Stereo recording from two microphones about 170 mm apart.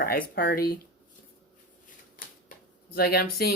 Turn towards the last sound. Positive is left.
turn(degrees=65)  # may be behind; listen again after turning